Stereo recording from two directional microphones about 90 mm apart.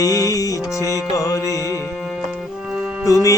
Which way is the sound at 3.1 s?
40° left (ahead or behind).